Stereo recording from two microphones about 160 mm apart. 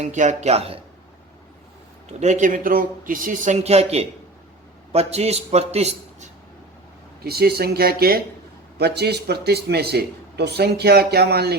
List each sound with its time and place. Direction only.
0.0 s a man's voice: 50° right (ahead or behind)
2.0 s a man's voice: 45° right (ahead or behind)
7.3 s speech: 80° right
8.8 s a man's voice: 90° right